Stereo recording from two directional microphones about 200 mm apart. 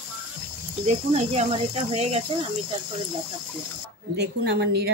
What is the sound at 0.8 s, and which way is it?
Speech, 30° right (ahead or behind).